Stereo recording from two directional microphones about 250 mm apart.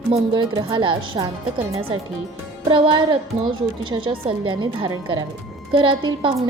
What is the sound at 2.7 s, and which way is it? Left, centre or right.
A woman's voice, centre.